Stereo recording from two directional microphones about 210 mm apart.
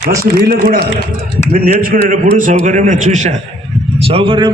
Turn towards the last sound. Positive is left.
turn(degrees=-25)  # may be behind; listen again after turning